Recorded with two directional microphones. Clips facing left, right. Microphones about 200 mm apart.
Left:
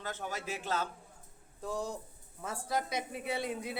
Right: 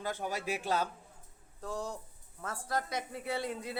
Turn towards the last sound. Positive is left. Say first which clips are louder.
# even
turn(degrees=20)  # may be behind; listen again after turning